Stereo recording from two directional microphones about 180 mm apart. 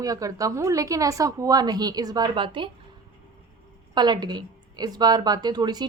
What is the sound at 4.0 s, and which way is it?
Speech, 25° right (ahead or behind).